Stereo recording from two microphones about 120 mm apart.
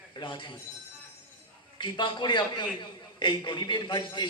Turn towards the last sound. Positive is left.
turn(degrees=40)  # may be behind; listen again after turning